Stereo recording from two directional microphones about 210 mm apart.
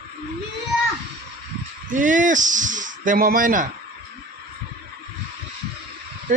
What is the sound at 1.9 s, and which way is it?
Speech, 40° right (ahead or behind).